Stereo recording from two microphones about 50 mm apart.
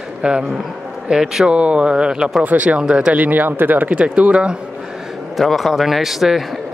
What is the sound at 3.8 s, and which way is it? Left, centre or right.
Speech, right.